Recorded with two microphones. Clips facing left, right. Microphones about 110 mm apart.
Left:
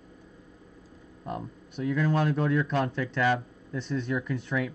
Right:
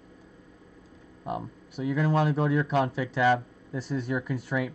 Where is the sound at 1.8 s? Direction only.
10° right (ahead or behind).